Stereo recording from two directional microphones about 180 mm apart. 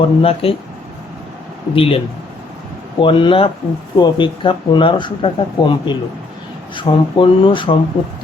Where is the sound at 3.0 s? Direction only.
30° left (ahead or behind).